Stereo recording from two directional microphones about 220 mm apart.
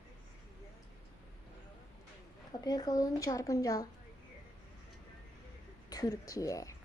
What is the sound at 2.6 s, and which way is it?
A woman's voice, 15° left (ahead or behind).